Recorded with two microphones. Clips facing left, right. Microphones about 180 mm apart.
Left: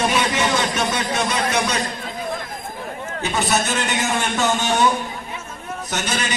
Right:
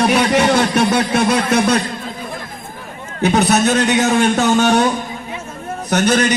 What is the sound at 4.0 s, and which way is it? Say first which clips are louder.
Speech: right 7 dB; 65° right (ahead or behind).